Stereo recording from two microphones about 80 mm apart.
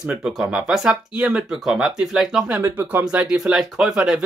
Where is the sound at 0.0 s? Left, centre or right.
Centre.